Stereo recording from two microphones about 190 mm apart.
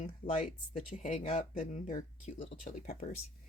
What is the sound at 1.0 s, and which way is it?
Speech, 40° left (ahead or behind).